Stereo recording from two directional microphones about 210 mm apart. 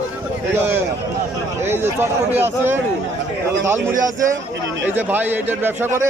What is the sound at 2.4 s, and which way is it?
Speech, 10° right (ahead or behind).